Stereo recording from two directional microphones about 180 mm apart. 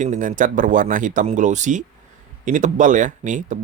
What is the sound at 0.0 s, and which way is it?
Speech, 45° right (ahead or behind).